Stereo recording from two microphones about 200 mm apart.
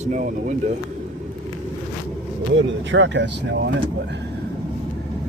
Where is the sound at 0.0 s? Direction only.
35° right (ahead or behind).